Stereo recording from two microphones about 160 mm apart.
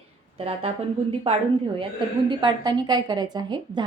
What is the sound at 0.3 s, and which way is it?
Speech, 40° right (ahead or behind).